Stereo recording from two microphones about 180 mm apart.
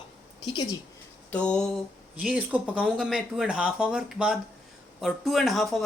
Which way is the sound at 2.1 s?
5° right (ahead or behind).